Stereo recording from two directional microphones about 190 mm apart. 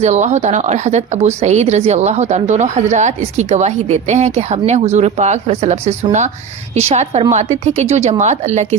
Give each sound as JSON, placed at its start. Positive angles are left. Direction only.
{"t": 0.0, "sound": "speech", "side_deg": -40}